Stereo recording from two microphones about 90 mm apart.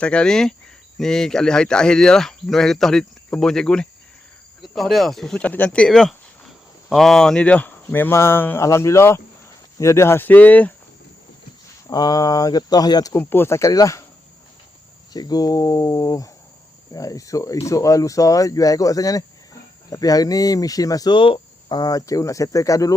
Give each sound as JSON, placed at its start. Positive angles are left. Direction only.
{"t": 0.0, "sound": "speech", "side_deg": 10}
{"t": 5.4, "sound": "speech", "side_deg": 15}
{"t": 7.9, "sound": "speech", "side_deg": 25}
{"t": 11.9, "sound": "speech", "side_deg": 45}
{"t": 13.1, "sound": "speech", "side_deg": 25}
{"t": 15.1, "sound": "speech", "side_deg": 45}
{"t": 21.1, "sound": "cricket", "side_deg": 70}
{"t": 21.8, "sound": "speech", "side_deg": 45}